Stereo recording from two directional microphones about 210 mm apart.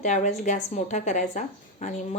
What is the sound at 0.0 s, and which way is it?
A woman's voice, 35° left (ahead or behind).